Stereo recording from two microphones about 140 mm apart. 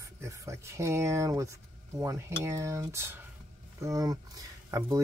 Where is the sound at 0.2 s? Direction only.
20° right (ahead or behind).